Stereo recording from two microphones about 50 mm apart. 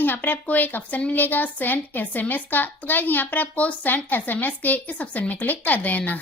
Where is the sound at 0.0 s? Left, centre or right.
Left.